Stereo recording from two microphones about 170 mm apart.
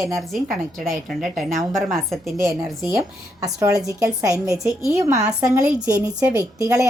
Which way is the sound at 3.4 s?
20° right (ahead or behind).